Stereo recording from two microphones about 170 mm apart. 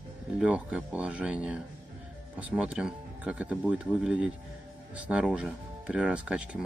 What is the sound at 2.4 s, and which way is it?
Speech, 5° right (ahead or behind).